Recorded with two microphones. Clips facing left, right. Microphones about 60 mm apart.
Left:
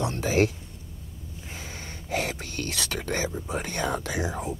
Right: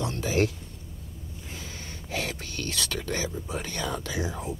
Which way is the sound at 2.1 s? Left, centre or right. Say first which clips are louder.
Left 3 dB; left.